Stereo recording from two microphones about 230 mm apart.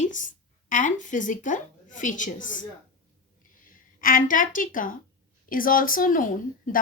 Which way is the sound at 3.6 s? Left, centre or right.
Left.